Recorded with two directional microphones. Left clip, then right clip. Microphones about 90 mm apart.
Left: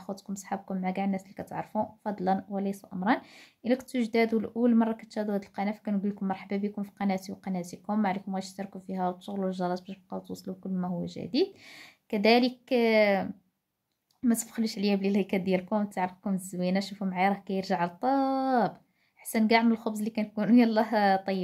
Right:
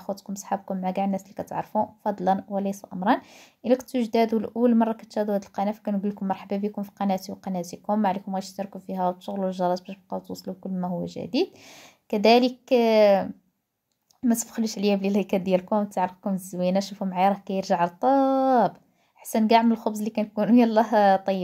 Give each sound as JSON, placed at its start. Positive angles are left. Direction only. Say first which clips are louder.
{"t": 0.0, "sound": "speech", "louder": "right 6 dB", "side_deg": -25}